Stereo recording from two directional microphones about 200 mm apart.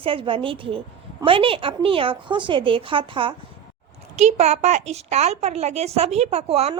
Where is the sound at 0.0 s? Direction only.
25° right (ahead or behind).